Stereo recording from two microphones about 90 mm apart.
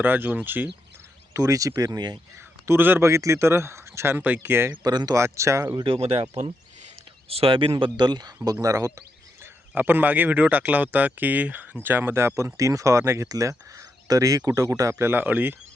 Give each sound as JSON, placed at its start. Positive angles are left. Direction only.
{"t": 0.0, "sound": "a man's voice", "side_deg": -20}
{"t": 1.3, "sound": "speech", "side_deg": -40}
{"t": 2.6, "sound": "a man's voice", "side_deg": -25}
{"t": 4.8, "sound": "speech", "side_deg": -50}
{"t": 5.1, "sound": "speech", "side_deg": -35}
{"t": 5.8, "sound": "speech", "side_deg": -85}
{"t": 7.3, "sound": "speech", "side_deg": -90}
{"t": 7.8, "sound": "speech", "side_deg": -55}
{"t": 8.6, "sound": "speech", "side_deg": -40}
{"t": 9.4, "sound": "a man's voice", "side_deg": -20}